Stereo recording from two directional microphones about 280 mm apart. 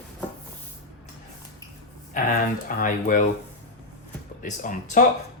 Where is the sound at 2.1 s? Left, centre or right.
Left.